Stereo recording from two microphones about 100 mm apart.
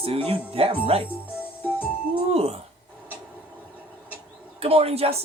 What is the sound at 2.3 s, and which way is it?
Speech, 90° right.